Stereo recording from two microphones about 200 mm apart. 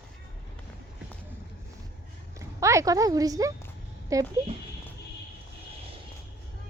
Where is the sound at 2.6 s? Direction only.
15° right (ahead or behind).